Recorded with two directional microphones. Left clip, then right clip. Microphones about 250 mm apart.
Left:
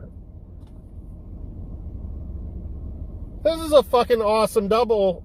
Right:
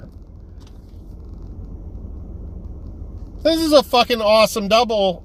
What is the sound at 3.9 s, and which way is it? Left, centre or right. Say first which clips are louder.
Speech: right 2 dB; right.